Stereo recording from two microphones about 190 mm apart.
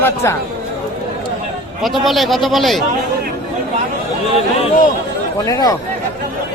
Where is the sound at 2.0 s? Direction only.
Centre (ahead or behind).